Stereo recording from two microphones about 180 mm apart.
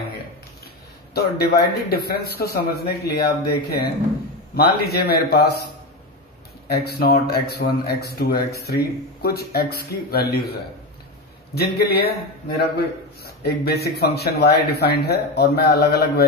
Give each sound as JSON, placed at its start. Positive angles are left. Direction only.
{"t": 1.1, "sound": "a man's voice", "side_deg": 60}
{"t": 6.7, "sound": "a man's voice", "side_deg": 60}